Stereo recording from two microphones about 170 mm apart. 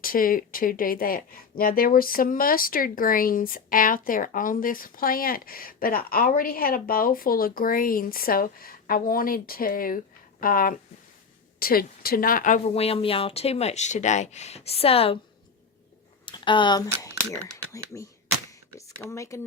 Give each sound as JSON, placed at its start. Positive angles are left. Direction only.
{"t": 0.0, "sound": "speech", "side_deg": 55}
{"t": 16.2, "sound": "speech", "side_deg": 30}